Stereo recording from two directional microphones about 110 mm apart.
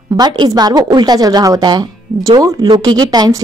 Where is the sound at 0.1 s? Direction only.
45° right (ahead or behind).